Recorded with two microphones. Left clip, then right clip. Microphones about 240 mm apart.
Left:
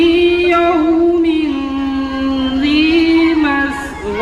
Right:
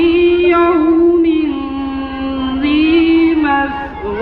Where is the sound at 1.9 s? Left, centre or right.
Left.